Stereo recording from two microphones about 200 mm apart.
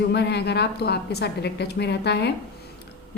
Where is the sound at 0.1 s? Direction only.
55° left (ahead or behind).